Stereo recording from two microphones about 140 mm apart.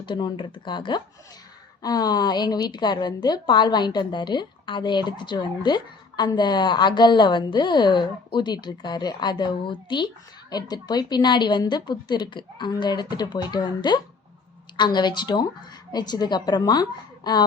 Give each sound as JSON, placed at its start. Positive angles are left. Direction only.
{"t": 0.0, "sound": "a woman's voice", "side_deg": 35}